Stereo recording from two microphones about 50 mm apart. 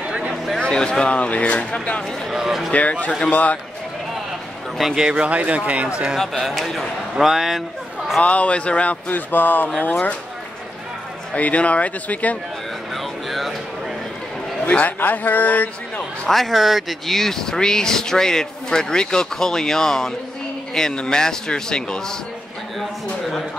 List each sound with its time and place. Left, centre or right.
0.6 s speech: centre
2.3 s speech: centre
2.7 s a man's voice: left
5.1 s speech: right
6.1 s a man's voice: centre
8.2 s speech: left
9.1 s a man's voice: left
11.3 s speech: left
12.9 s a sound: centre
14.7 s a man's voice: left
16.3 s speech: centre